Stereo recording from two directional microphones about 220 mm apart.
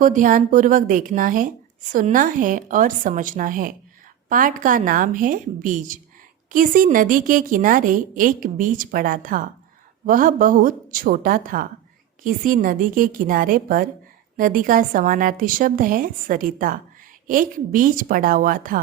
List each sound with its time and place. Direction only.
0.0 s a woman's voice: 35° right (ahead or behind)